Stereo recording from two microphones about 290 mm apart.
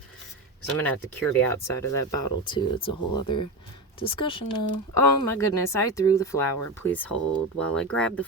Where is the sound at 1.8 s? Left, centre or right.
Centre.